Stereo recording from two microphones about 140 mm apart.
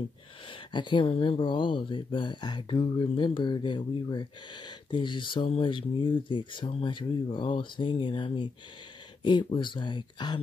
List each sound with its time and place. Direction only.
0.7 s speech: 35° left (ahead or behind)